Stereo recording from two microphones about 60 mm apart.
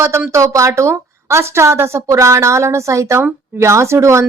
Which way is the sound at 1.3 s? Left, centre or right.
Right.